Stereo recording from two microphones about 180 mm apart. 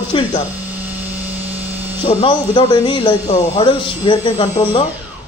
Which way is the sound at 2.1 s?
35° left (ahead or behind).